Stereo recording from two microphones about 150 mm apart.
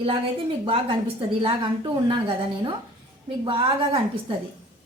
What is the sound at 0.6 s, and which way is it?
A woman's voice, 40° right (ahead or behind).